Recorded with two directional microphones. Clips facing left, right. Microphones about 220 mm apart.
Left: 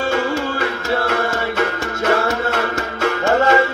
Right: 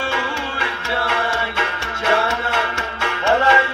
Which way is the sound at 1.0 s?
45° left (ahead or behind).